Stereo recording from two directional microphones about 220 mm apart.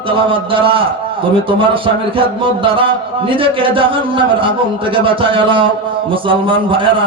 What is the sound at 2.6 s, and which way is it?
Speech, 25° right (ahead or behind).